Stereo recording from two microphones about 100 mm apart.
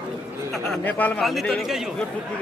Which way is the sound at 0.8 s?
15° left (ahead or behind).